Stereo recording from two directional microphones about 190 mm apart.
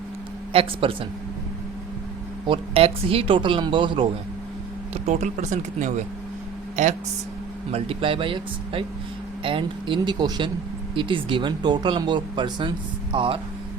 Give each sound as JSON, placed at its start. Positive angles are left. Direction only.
{"t": 0.5, "sound": "speech", "side_deg": -30}
{"t": 2.5, "sound": "speech", "side_deg": -30}
{"t": 5.0, "sound": "speech", "side_deg": -40}
{"t": 7.7, "sound": "speech", "side_deg": -30}